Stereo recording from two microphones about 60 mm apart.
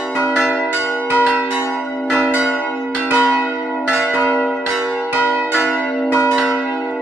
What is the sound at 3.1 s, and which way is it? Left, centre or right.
Church bell, right.